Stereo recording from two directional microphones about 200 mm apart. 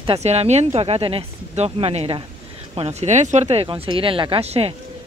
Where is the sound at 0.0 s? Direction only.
30° right (ahead or behind).